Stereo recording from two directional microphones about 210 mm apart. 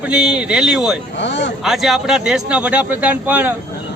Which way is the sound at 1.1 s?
60° left (ahead or behind).